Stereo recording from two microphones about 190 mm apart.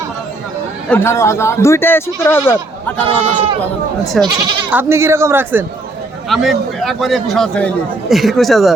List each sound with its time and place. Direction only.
0.9 s speech: 15° left (ahead or behind)
3.1 s speech: 30° right (ahead or behind)
4.0 s a man's voice: centre (ahead or behind)
4.7 s speech: 10° right (ahead or behind)
6.2 s a man's voice: centre (ahead or behind)